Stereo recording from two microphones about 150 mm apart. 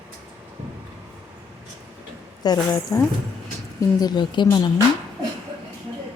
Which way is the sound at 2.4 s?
25° left (ahead or behind).